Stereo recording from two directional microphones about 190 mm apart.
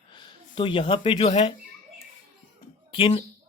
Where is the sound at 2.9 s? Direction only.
25° left (ahead or behind).